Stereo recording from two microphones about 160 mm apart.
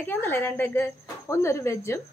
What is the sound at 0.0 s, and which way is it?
A woman's voice, 15° left (ahead or behind).